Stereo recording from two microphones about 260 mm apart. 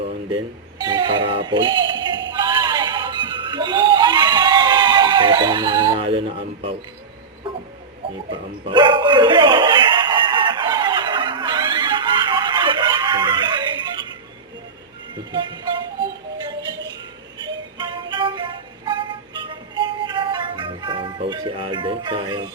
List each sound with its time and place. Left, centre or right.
0.9 s speech: centre
2.3 s music: centre
8.3 s a sound: centre
15.1 s music: centre